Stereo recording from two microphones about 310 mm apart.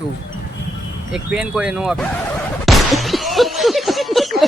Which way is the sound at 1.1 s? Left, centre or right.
Centre.